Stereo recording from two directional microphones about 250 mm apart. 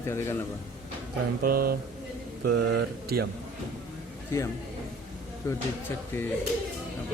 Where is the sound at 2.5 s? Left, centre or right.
Right.